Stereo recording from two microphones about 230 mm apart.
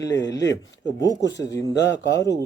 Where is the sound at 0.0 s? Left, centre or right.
Centre.